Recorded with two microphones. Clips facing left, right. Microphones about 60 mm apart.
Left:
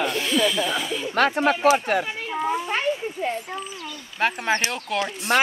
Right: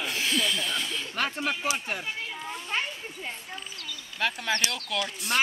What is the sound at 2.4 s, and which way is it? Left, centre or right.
Speech, left.